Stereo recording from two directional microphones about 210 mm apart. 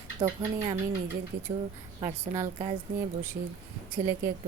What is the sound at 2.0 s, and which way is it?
Speech, 15° right (ahead or behind).